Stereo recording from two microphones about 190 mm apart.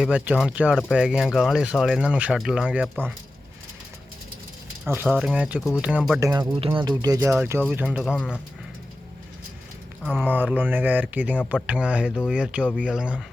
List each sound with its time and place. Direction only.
0.0 s speech: 5° right (ahead or behind)
5.0 s speech: centre (ahead or behind)
6.1 s speech: 15° right (ahead or behind)
7.9 s speech: 5° left (ahead or behind)
10.0 s speech: 5° left (ahead or behind)
10.2 s speech: 10° right (ahead or behind)